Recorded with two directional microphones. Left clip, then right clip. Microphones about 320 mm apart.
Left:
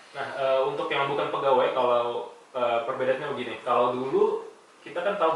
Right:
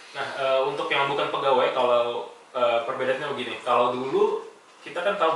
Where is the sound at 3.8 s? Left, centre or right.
Centre.